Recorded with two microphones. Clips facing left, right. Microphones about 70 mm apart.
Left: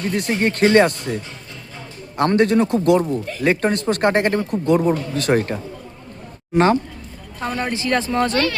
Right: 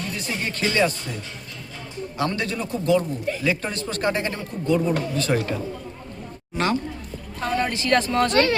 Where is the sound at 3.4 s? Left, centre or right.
Left.